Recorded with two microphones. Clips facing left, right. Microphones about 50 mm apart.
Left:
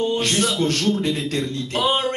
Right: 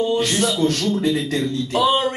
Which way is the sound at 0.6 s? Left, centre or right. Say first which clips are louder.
Right 1 dB; left.